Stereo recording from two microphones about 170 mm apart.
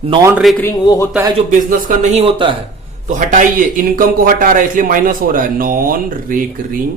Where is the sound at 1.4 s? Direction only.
50° right (ahead or behind); by 2.6 s 30° right (ahead or behind).